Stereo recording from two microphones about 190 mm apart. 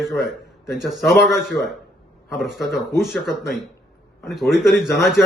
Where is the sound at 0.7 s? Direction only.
Centre (ahead or behind).